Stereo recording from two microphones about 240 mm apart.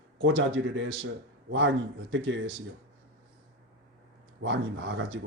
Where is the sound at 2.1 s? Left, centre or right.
Right.